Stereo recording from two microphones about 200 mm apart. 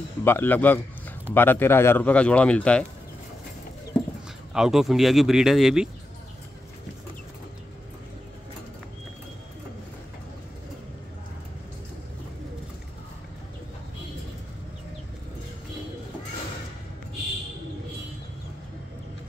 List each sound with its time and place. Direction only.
0.2 s a man's voice: 10° left (ahead or behind)
4.6 s speech: centre (ahead or behind)